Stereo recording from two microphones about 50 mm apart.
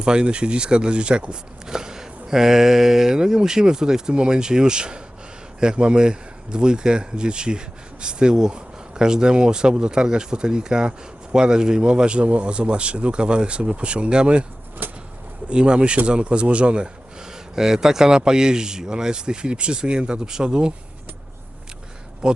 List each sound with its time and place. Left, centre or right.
0.0 s a man's voice: centre
14.8 s bird: right
15.4 s a man's voice: centre
22.2 s speech: centre